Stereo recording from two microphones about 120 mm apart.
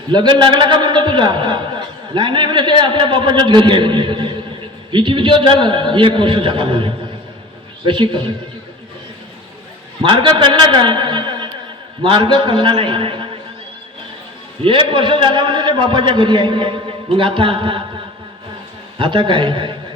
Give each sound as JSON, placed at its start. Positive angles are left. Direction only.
{"t": 0.1, "sound": "a man's voice", "side_deg": -40}
{"t": 10.0, "sound": "a man's voice", "side_deg": -45}
{"t": 14.6, "sound": "a man's voice", "side_deg": -45}
{"t": 18.9, "sound": "a man's voice", "side_deg": -45}